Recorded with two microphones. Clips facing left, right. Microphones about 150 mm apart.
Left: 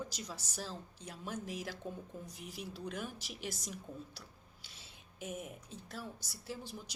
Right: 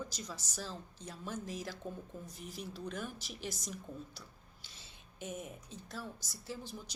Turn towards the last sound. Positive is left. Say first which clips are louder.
# even
turn(degrees=10)  # may be behind; listen again after turning